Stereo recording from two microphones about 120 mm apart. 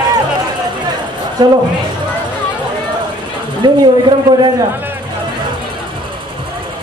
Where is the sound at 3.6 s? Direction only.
40° right (ahead or behind).